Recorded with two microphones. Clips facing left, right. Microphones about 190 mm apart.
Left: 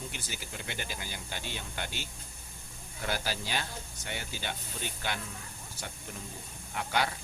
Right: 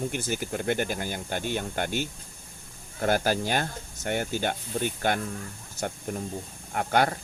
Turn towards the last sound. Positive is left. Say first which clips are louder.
# right 7 dB
turn(degrees=-50)  # may be behind; listen again after turning